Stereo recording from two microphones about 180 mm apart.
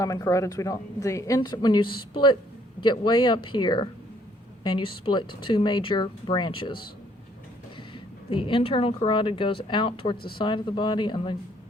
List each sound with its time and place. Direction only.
0.0 s a woman's voice: 20° left (ahead or behind)
7.9 s a woman's voice: 30° left (ahead or behind)